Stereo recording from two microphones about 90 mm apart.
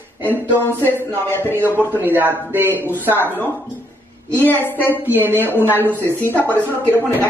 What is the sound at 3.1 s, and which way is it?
Music, 25° left (ahead or behind).